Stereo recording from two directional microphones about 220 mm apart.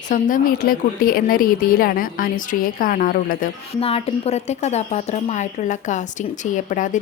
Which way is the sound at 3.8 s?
25° left (ahead or behind).